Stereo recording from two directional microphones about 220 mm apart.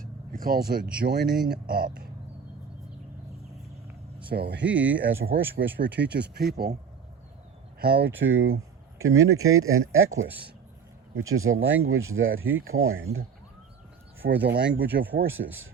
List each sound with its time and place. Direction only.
0.0 s a sound: 40° right (ahead or behind)
0.9 s speech: 45° right (ahead or behind)
4.3 s speech: 45° right (ahead or behind)
4.6 s speech: 5° right (ahead or behind)
5.3 s speech: 45° right (ahead or behind)
7.8 s speech: 45° right (ahead or behind)
8.2 s speech: 60° right (ahead or behind)
11.2 s speech: 65° right (ahead or behind)
14.2 s speech: 55° right (ahead or behind)
14.7 s speech: 10° right (ahead or behind)
15.4 s speech: 45° right (ahead or behind)